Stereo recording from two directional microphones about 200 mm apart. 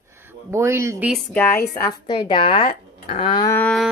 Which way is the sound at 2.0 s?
25° left (ahead or behind).